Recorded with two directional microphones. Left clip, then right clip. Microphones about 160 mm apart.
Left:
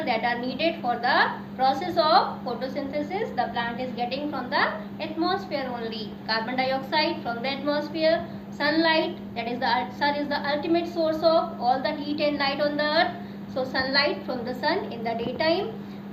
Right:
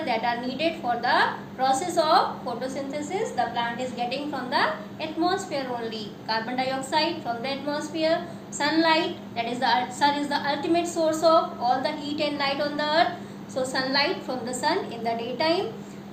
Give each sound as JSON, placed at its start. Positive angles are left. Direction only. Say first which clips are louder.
{"t": 0.0, "sound": "a woman's voice", "louder": "even", "side_deg": -30}